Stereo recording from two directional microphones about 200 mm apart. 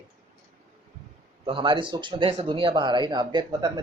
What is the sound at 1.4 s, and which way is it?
Speech, 25° right (ahead or behind).